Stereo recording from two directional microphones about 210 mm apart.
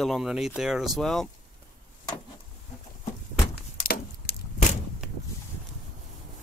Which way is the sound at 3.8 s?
45° left (ahead or behind).